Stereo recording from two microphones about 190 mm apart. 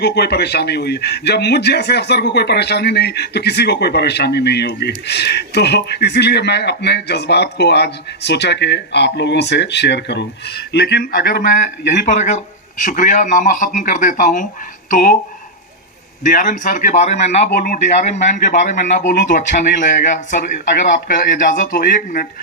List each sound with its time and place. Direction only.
0.0 s a man's voice: 60° left (ahead or behind)
11.9 s speech: 40° left (ahead or behind)
16.2 s speech: 40° left (ahead or behind)